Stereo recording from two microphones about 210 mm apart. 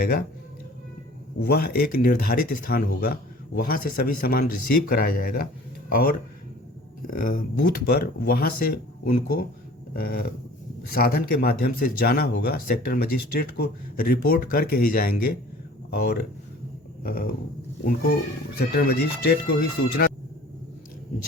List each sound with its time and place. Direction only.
0.0 s speech: 50° left (ahead or behind)
1.4 s speech: 50° left (ahead or behind)
18.5 s speech: 45° left (ahead or behind)